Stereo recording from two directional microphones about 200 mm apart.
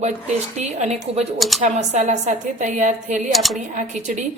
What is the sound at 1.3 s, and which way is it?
Speech, centre (ahead or behind).